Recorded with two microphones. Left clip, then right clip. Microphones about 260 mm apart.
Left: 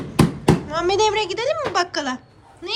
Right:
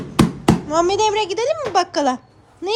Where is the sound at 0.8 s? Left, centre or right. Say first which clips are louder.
Left 4 dB; centre.